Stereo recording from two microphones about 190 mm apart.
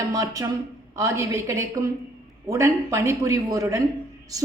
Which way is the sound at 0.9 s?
15° right (ahead or behind).